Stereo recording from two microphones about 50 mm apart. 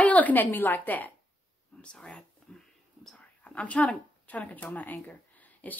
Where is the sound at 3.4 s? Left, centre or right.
Left.